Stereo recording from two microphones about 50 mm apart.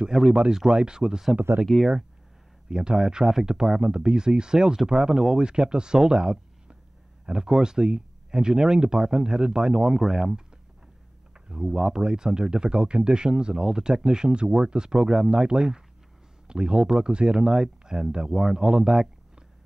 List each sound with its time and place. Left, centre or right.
0.1 s speech: centre
1.7 s speech: centre
2.7 s speech: centre
11.3 s a sound: centre
11.7 s speech: centre